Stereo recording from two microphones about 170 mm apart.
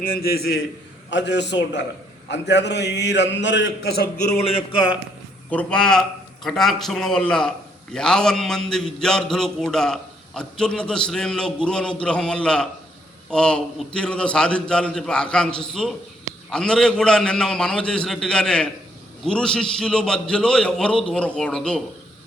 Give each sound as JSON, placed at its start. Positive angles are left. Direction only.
{"t": 0.2, "sound": "a man's voice", "side_deg": 65}
{"t": 1.1, "sound": "a man's voice", "side_deg": 90}
{"t": 5.5, "sound": "a man's voice", "side_deg": 5}